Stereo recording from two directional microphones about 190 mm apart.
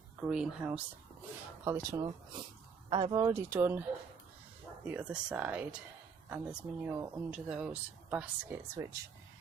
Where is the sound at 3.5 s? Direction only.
10° right (ahead or behind).